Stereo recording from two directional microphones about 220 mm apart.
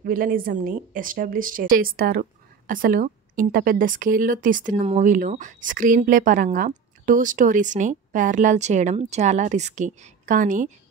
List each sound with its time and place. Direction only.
0.0 s a woman's voice: 40° right (ahead or behind)